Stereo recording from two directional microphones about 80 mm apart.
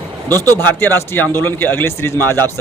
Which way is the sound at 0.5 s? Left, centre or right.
Left.